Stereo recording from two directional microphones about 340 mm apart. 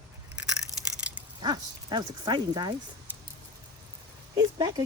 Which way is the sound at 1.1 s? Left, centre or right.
Centre.